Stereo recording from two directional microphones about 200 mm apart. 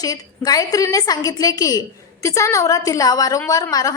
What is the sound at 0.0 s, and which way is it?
A woman's voice, 20° left (ahead or behind).